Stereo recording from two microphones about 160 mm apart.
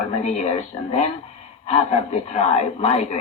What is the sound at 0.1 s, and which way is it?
Speech, 45° left (ahead or behind).